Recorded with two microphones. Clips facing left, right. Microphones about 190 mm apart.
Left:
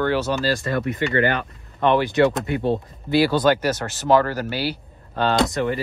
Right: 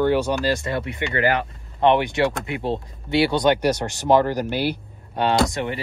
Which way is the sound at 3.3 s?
5° left (ahead or behind).